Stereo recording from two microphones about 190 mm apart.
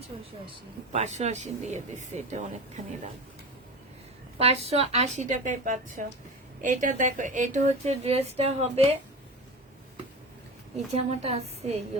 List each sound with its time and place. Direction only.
0.9 s a woman's voice: 35° right (ahead or behind)
4.4 s a woman's voice: 30° right (ahead or behind)
10.8 s a woman's voice: 35° right (ahead or behind)